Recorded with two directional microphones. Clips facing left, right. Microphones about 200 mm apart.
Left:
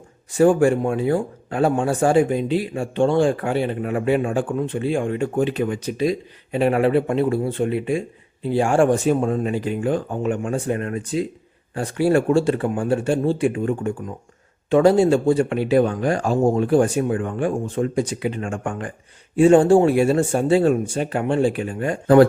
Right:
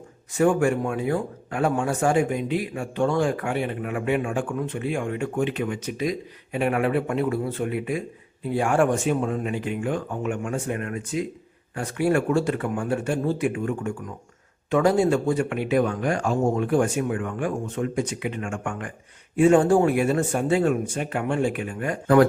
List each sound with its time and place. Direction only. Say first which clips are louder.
0.3 s speech: left 5 dB; 30° left (ahead or behind)